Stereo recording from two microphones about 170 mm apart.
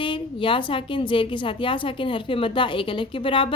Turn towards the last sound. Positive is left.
turn(degrees=30)  # may be behind; listen again after turning